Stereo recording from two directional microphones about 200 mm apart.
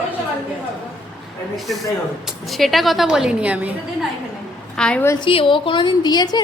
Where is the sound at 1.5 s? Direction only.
Centre (ahead or behind).